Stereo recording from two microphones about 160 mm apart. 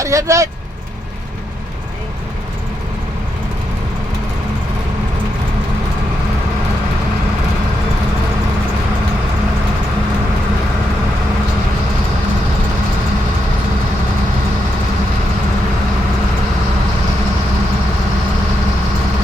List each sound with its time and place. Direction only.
0.0 s speech: 20° right (ahead or behind)